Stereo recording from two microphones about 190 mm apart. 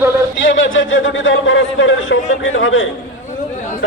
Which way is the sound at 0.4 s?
85° left.